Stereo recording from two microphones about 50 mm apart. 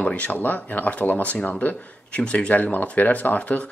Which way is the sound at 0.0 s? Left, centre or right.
Left.